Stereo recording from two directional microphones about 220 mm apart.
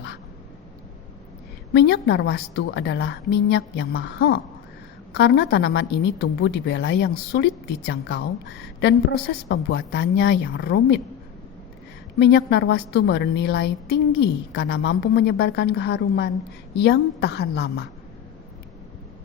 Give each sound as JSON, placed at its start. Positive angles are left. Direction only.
{"t": 1.7, "sound": "a woman's voice", "side_deg": 50}
{"t": 12.2, "sound": "a woman's voice", "side_deg": 50}